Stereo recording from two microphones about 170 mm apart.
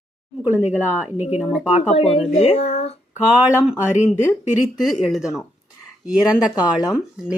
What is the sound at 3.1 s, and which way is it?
Speech, 10° right (ahead or behind).